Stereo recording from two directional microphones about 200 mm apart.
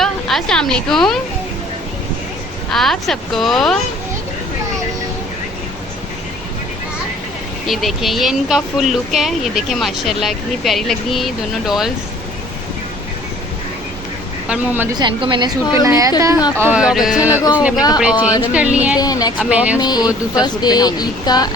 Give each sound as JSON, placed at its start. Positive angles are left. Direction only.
{"t": 0.0, "sound": "a woman's voice", "side_deg": 0}
{"t": 2.7, "sound": "speech", "side_deg": 0}
{"t": 7.7, "sound": "speech", "side_deg": 0}
{"t": 14.4, "sound": "speech", "side_deg": -10}
{"t": 14.9, "sound": "a woman's voice", "side_deg": -25}
{"t": 17.7, "sound": "a woman's voice", "side_deg": 20}
{"t": 18.0, "sound": "a woman's voice", "side_deg": -5}
{"t": 18.9, "sound": "a woman's voice", "side_deg": 20}
{"t": 19.5, "sound": "a woman's voice", "side_deg": -5}
{"t": 19.8, "sound": "a woman's voice", "side_deg": 20}